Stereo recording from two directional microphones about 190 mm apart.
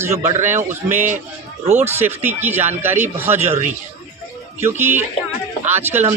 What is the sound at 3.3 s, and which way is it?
Speech, 35° right (ahead or behind).